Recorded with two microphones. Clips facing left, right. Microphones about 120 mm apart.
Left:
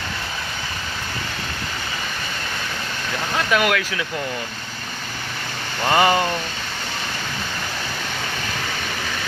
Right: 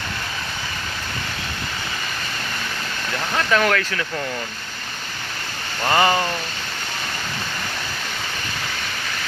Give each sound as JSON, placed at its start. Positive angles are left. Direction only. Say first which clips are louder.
{"t": 3.3, "sound": "speech", "louder": "right 1 dB", "side_deg": 10}
{"t": 5.8, "sound": "speech", "louder": "left 1 dB", "side_deg": 15}